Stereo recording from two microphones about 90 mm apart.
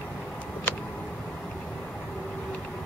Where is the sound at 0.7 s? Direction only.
20° left (ahead or behind).